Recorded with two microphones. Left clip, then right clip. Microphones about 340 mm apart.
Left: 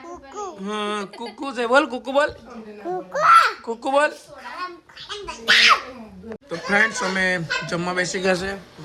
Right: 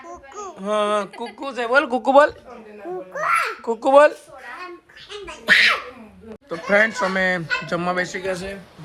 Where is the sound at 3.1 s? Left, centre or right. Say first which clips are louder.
Left 7 dB; centre.